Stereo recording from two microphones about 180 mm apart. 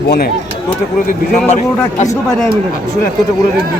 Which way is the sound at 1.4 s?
40° left (ahead or behind).